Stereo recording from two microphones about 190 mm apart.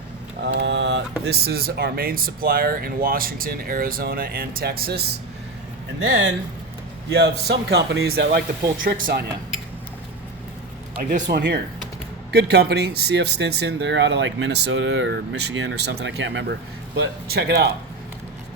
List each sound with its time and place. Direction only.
0.4 s mantra: 65° right (ahead or behind)
1.2 s speech: 55° right (ahead or behind)
6.0 s speech: 65° right (ahead or behind)
8.8 s speech: 45° right (ahead or behind)
11.1 s speech: 55° right (ahead or behind)